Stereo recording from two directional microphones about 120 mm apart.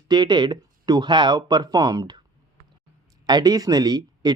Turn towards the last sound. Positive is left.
turn(degrees=-35)  # may be behind; listen again after turning